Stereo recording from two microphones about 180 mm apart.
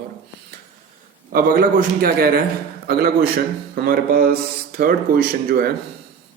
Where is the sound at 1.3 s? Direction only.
50° right (ahead or behind).